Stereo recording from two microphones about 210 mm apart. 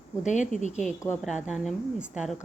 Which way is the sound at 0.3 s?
35° left (ahead or behind).